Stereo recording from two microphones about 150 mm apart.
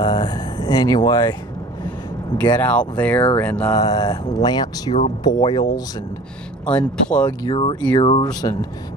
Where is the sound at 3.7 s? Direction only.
25° left (ahead or behind).